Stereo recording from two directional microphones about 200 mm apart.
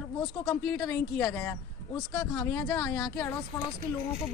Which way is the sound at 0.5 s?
5° left (ahead or behind).